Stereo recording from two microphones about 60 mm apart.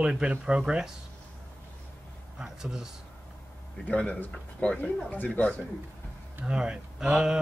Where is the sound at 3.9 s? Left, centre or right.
Left.